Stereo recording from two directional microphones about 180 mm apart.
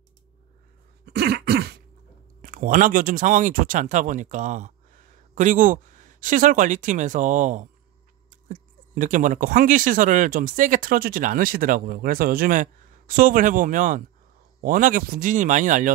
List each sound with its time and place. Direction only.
1.0 s throat clearing: 60° right (ahead or behind)
2.4 s speech: 50° right (ahead or behind)